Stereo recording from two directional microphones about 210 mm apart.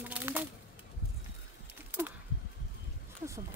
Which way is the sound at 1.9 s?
10° right (ahead or behind).